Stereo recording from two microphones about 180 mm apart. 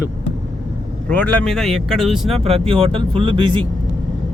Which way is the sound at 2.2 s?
35° right (ahead or behind).